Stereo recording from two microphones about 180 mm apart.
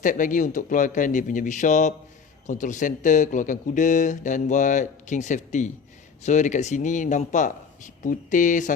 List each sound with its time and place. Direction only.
0.0 s speech: 45° left (ahead or behind)